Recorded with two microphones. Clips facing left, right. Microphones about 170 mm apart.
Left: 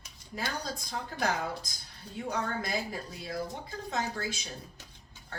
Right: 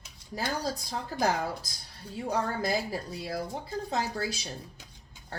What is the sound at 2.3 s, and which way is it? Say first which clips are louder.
A woman's voice: right 4 dB; 35° right (ahead or behind).